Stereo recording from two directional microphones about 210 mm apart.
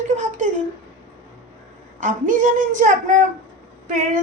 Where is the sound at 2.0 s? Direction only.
35° right (ahead or behind).